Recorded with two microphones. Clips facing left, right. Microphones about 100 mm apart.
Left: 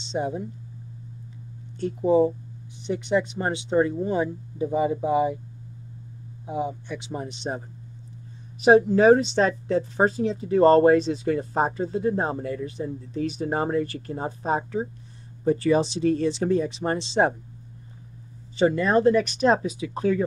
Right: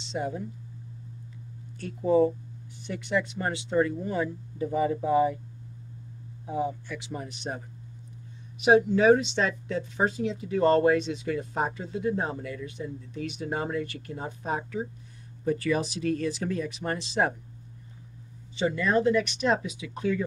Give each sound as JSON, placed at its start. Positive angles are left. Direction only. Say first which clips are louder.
{"t": 0.0, "sound": "speech", "louder": "left 4 dB", "side_deg": 25}
{"t": 1.8, "sound": "speech", "louder": "left 3 dB", "side_deg": 20}
{"t": 6.4, "sound": "speech", "louder": "left 1 dB", "side_deg": 20}
{"t": 8.5, "sound": "speech", "louder": "left 4 dB", "side_deg": 35}
{"t": 18.6, "sound": "speech", "louder": "left 5 dB", "side_deg": 40}